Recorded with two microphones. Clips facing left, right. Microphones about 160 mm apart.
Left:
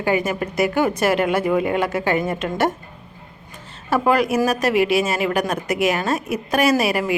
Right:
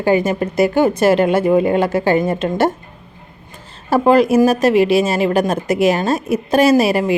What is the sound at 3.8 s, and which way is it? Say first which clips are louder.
A woman's voice: right 6 dB; 30° right (ahead or behind).